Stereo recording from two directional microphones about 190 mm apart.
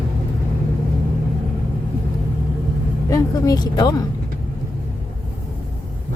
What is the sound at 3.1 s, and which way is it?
Speech, 20° left (ahead or behind).